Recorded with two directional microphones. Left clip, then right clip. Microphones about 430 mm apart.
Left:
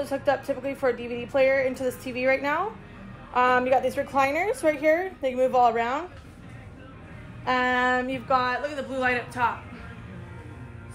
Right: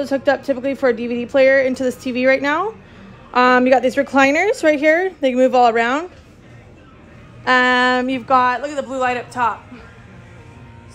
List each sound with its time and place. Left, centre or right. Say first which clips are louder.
0.0 s a woman's voice: right 8 dB; right
7.4 s a woman's voice: right 9 dB; centre